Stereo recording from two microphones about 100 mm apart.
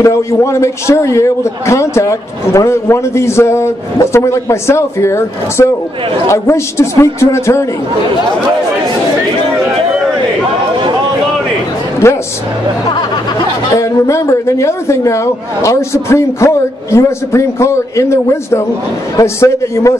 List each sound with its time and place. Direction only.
0.0 s a man's voice: 30° left (ahead or behind)
12.0 s a woman's voice: 30° left (ahead or behind)
13.7 s a man's voice: 30° left (ahead or behind)